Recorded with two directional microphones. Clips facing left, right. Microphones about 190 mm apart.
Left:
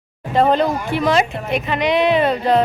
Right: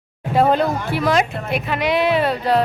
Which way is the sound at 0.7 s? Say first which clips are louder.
Left 1 dB; 15° left (ahead or behind).